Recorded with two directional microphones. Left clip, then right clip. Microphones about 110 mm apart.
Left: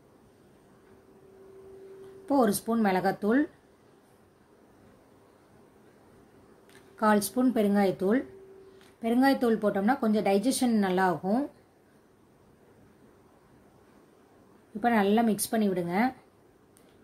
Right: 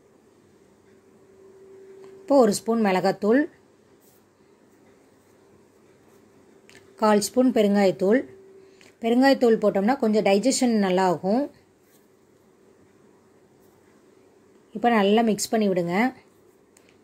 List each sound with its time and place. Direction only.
2.2 s speech: 25° right (ahead or behind)
7.2 s speech: 15° right (ahead or behind)
14.8 s speech: 25° right (ahead or behind)